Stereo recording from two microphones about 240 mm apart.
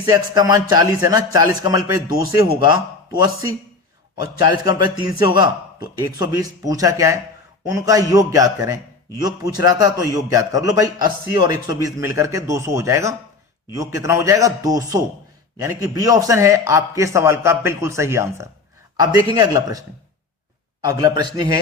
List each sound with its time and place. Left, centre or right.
0.0 s a man's voice: centre
4.4 s a man's voice: centre
20.8 s a man's voice: centre